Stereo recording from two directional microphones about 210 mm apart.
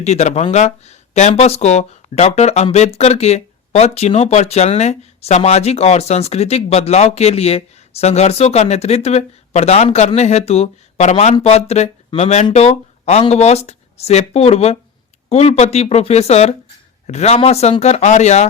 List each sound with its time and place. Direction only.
0.0 s speech: 30° left (ahead or behind)